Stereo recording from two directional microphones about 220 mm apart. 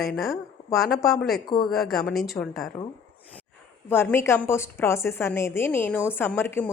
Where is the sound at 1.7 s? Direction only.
Centre (ahead or behind).